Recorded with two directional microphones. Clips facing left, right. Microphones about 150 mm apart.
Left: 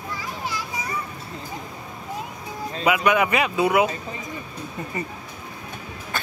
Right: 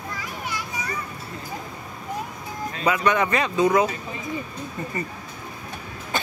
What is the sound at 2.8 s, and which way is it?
Speech, 10° left (ahead or behind).